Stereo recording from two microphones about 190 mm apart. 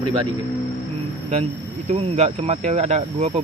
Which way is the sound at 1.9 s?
35° right (ahead or behind).